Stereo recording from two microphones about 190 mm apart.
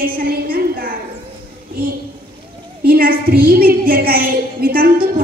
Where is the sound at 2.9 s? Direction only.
50° right (ahead or behind).